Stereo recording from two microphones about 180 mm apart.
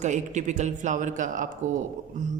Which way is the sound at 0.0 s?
40° right (ahead or behind).